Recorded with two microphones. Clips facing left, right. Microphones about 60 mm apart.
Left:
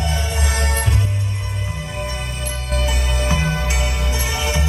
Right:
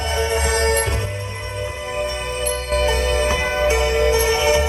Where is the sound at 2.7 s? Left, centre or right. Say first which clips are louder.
Right 5 dB; right.